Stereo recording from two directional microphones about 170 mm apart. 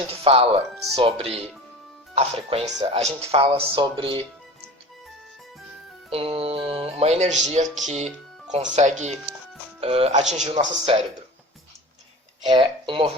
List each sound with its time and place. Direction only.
0.1 s speech: 35° right (ahead or behind)
2.7 s speech: 25° right (ahead or behind)
3.0 s speech: 35° right (ahead or behind)
6.1 s music: 35° right (ahead or behind)
6.9 s speech: 40° right (ahead or behind)
12.5 s speech: 25° right (ahead or behind)